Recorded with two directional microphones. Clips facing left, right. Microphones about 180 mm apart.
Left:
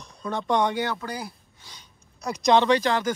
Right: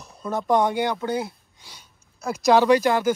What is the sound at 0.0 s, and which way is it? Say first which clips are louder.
Speech: right 2 dB; 5° right (ahead or behind).